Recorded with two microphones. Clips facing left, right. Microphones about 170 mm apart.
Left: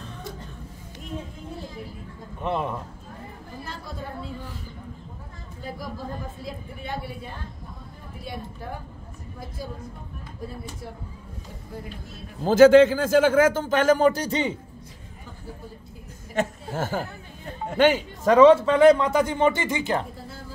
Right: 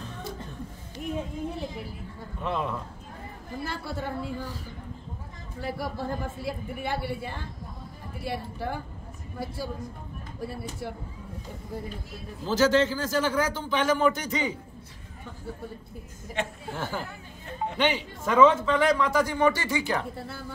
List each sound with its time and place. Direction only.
2.4 s speech: 20° left (ahead or behind)
3.6 s speech: 75° right (ahead or behind)
5.8 s speech: 75° right (ahead or behind)
10.4 s speech: 70° right (ahead or behind)
12.4 s a man's voice: 55° left (ahead or behind); by 14.5 s 30° left (ahead or behind)
16.3 s a man's voice: 45° left (ahead or behind); by 20.1 s 20° left (ahead or behind)
20.2 s speech: 65° right (ahead or behind)